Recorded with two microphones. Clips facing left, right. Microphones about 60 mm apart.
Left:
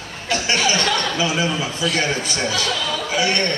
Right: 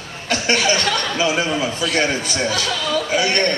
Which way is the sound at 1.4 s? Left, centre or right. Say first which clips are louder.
Right 1 dB; right.